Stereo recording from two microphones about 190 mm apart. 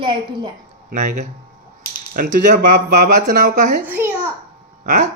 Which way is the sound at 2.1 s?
55° right (ahead or behind).